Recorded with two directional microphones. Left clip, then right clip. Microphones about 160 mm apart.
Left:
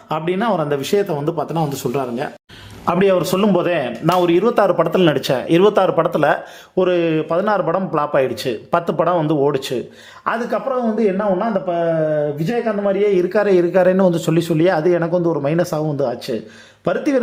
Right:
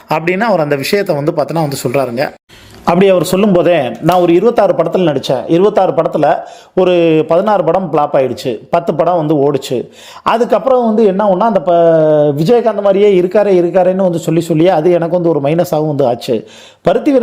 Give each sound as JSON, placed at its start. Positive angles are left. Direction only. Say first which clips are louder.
{"t": 0.1, "sound": "a man's voice", "louder": "right 7 dB", "side_deg": -20}
{"t": 6.7, "sound": "a man's voice", "louder": "right 7 dB", "side_deg": -25}
{"t": 10.2, "sound": "speech", "louder": "right 10 dB", "side_deg": -35}
{"t": 13.1, "sound": "a man's voice", "louder": "right 6 dB", "side_deg": -15}